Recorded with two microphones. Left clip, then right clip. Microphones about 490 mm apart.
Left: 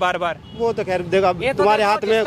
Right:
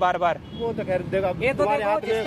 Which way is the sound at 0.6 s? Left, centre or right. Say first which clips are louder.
Left 6 dB; left.